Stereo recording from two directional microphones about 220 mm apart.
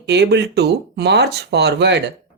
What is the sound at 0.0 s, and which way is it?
Speech, 50° right (ahead or behind).